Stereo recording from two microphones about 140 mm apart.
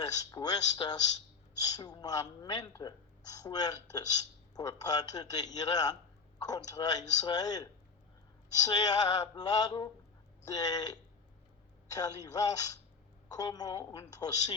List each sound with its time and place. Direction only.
0.0 s a woman's voice: 30° left (ahead or behind)